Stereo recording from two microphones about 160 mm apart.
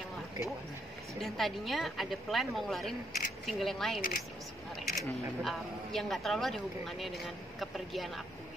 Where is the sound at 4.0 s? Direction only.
65° left (ahead or behind).